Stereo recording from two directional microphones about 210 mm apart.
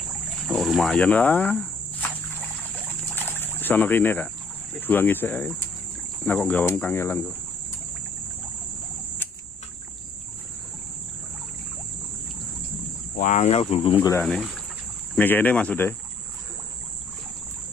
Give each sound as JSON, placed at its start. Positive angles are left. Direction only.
{"t": 0.3, "sound": "insect", "side_deg": 0}
{"t": 3.2, "sound": "a sound", "side_deg": 10}
{"t": 4.7, "sound": "speech", "side_deg": 10}
{"t": 13.1, "sound": "speech", "side_deg": 35}
{"t": 14.2, "sound": "speech", "side_deg": 0}